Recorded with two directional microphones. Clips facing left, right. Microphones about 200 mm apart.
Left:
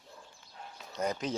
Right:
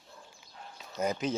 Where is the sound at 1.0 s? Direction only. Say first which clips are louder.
Right 2 dB; 5° right (ahead or behind).